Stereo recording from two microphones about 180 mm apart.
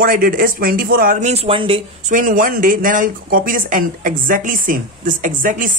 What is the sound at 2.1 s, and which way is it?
Speech, 50° right (ahead or behind).